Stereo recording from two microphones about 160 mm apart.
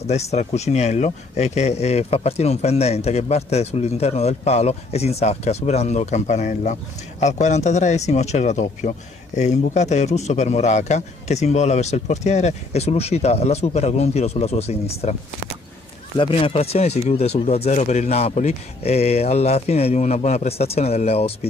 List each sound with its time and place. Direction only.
0.0 s speech: 45° left (ahead or behind)
16.2 s speech: 35° left (ahead or behind)